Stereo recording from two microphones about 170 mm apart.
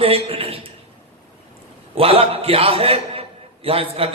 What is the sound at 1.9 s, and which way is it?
A man's voice, 35° right (ahead or behind).